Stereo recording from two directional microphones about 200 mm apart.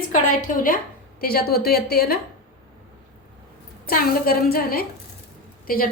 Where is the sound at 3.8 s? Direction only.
45° left (ahead or behind).